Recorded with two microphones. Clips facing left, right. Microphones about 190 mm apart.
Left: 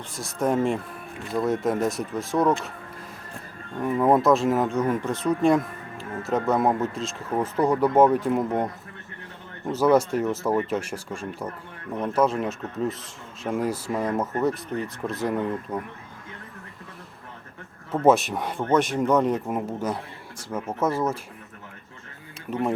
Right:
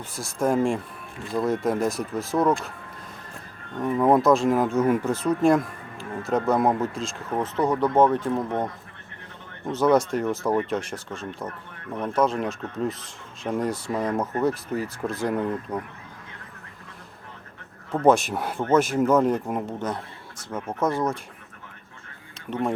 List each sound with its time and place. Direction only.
0.2 s speech: centre (ahead or behind)
3.8 s speech: 5° left (ahead or behind)
18.0 s speech: centre (ahead or behind)
22.4 s speech: 5° left (ahead or behind)